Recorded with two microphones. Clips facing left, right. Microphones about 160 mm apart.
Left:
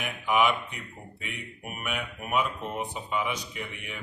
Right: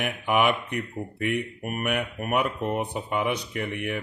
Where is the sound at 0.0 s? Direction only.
60° right (ahead or behind).